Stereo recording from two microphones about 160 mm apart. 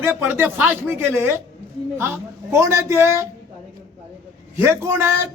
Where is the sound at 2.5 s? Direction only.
15° right (ahead or behind).